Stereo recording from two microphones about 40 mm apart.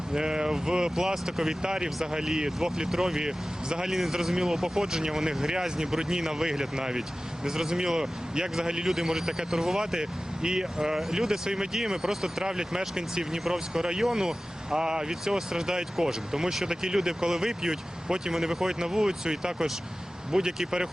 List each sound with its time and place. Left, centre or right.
0.1 s speech: centre
3.8 s a man's voice: centre